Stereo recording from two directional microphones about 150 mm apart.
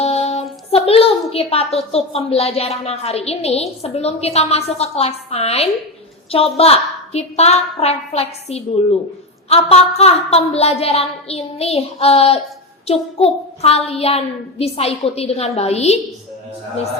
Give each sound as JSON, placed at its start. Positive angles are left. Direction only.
{"t": 0.0, "sound": "music", "side_deg": 45}
{"t": 1.3, "sound": "a woman's voice", "side_deg": 40}